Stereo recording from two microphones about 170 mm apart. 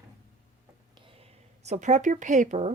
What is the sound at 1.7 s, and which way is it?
Speech, 45° right (ahead or behind).